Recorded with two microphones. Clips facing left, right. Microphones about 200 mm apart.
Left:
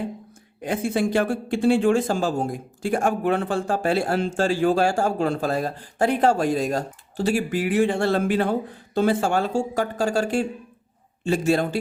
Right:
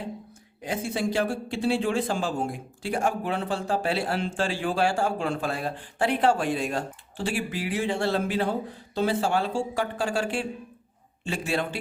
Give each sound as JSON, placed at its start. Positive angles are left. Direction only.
{"t": 0.6, "sound": "a man's voice", "side_deg": 55}